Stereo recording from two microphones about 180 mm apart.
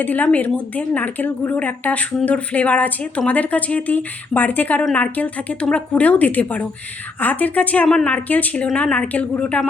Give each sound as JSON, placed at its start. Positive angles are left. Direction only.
{"t": 0.0, "sound": "a woman's voice", "side_deg": 10}